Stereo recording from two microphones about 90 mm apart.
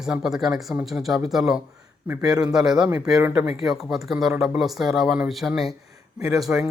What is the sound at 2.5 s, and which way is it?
Speech, 5° right (ahead or behind).